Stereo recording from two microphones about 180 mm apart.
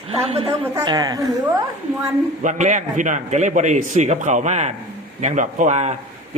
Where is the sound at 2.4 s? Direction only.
40° right (ahead or behind).